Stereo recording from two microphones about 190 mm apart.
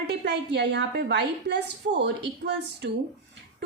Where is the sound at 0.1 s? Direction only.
65° right (ahead or behind).